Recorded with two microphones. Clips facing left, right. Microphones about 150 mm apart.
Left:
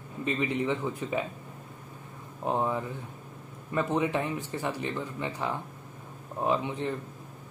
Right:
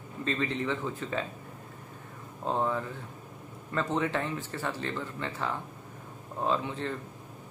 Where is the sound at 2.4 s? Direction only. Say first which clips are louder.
Left 1 dB; 15° left (ahead or behind).